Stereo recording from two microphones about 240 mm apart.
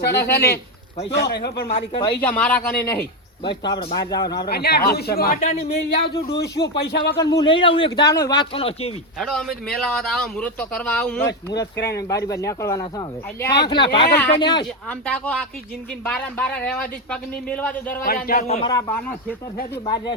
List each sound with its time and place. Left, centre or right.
0.3 s speech: left
1.9 s a man's voice: left
2.2 s speech: centre
3.4 s a man's voice: centre
4.4 s speech: left
6.0 s speech: left
7.2 s a man's voice: centre
9.1 s a man's voice: centre
14.8 s speech: centre
18.0 s speech: left
18.7 s speech: centre